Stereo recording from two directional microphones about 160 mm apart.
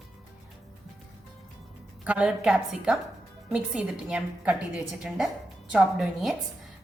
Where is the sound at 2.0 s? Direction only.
5° right (ahead or behind).